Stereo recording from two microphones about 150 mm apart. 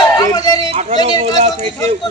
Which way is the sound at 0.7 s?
40° right (ahead or behind).